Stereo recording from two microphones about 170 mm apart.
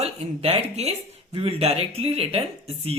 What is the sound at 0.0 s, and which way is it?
Speech, 35° right (ahead or behind).